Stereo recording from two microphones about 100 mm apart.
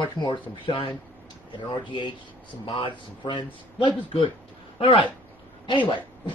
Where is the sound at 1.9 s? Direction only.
50° left (ahead or behind).